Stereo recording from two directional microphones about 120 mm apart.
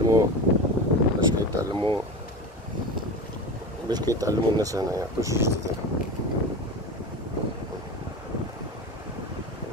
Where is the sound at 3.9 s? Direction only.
30° right (ahead or behind).